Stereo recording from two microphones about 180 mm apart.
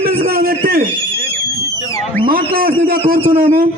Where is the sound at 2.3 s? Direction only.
55° right (ahead or behind).